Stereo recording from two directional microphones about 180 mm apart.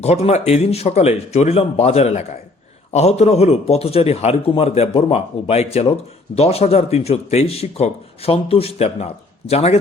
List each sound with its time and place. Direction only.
0.0 s speech: 35° left (ahead or behind)